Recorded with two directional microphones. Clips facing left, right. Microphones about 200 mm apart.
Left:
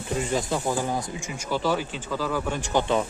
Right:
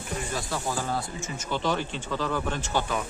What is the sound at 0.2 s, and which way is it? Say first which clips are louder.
Speech: left 6 dB; 20° left (ahead or behind).